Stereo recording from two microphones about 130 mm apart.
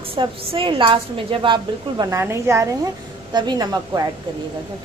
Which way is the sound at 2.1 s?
20° right (ahead or behind).